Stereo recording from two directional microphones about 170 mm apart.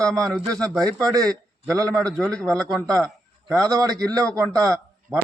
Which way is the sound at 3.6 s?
20° right (ahead or behind).